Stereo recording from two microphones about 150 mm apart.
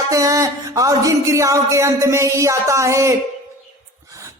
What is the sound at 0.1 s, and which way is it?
A man's voice, 20° right (ahead or behind).